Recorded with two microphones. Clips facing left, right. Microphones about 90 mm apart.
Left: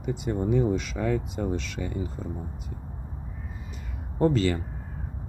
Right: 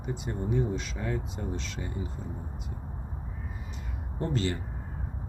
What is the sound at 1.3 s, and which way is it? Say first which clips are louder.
Speech: left 6 dB; 70° left (ahead or behind).